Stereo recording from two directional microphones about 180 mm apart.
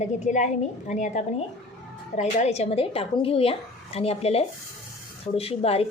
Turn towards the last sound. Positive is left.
turn(degrees=35)  # may be behind; listen again after turning